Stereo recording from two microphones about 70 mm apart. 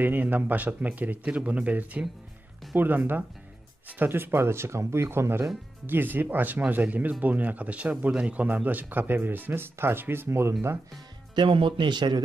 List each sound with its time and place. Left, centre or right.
0.0 s speech: right
5.9 s speech: right
11.4 s a man's voice: right